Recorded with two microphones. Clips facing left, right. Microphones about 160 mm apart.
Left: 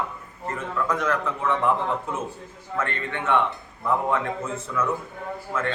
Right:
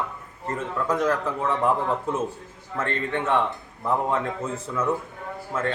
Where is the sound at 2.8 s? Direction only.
35° right (ahead or behind).